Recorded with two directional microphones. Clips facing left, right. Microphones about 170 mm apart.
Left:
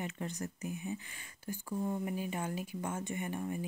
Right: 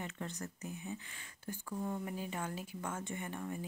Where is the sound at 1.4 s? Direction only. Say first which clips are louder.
Left 4 dB; 10° left (ahead or behind).